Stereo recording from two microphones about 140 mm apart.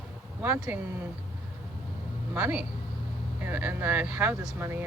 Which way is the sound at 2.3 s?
10° right (ahead or behind).